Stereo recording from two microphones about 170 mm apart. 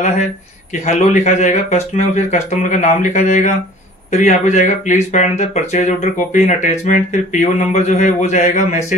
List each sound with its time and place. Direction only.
0.8 s speech: 45° left (ahead or behind)